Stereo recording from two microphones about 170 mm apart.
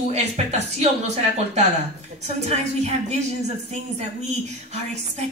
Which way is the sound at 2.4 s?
40° right (ahead or behind).